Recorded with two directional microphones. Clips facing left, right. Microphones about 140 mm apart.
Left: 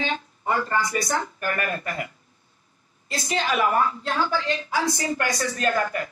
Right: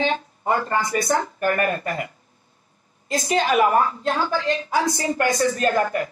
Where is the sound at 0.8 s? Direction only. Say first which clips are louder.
Right 4 dB; 45° right (ahead or behind).